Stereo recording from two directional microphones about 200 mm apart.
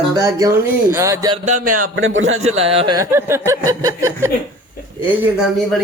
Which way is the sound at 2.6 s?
30° right (ahead or behind).